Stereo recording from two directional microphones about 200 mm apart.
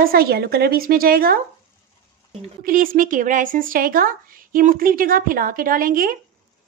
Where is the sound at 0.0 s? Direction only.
50° right (ahead or behind).